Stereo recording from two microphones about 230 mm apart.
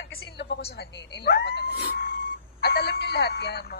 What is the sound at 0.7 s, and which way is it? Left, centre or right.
Speech, left.